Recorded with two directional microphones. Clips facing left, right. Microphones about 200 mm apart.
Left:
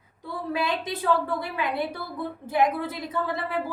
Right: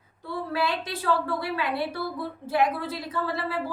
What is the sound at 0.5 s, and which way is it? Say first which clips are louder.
A woman's voice: left 1 dB; 20° left (ahead or behind).